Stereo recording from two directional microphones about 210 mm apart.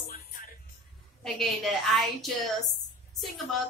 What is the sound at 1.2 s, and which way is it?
A woman's voice, centre (ahead or behind).